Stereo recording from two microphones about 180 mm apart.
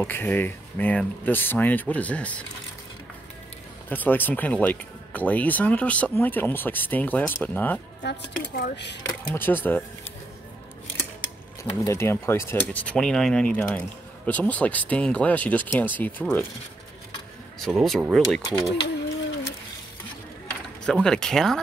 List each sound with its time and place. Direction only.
0.0 s speech: 10° left (ahead or behind)
3.9 s speech: 10° left (ahead or behind)
8.0 s speech: 70° left (ahead or behind)
8.4 s speech: 60° left (ahead or behind)
9.2 s speech: 10° left (ahead or behind)
11.8 s speech: 15° left (ahead or behind)
17.6 s speech: centre (ahead or behind)
20.4 s speech: 5° left (ahead or behind)